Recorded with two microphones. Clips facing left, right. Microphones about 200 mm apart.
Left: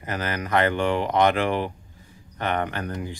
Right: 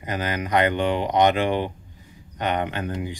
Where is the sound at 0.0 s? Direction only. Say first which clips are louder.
Right 2 dB; 15° right (ahead or behind).